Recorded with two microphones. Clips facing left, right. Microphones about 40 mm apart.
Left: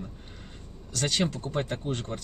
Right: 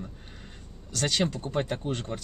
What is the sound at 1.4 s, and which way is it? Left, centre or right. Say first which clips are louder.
Speech: right 1 dB; right.